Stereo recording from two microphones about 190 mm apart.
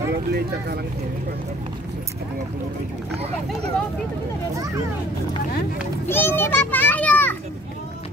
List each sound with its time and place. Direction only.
0.1 s speech: 55° right (ahead or behind)
6.0 s a child's voice: 10° left (ahead or behind)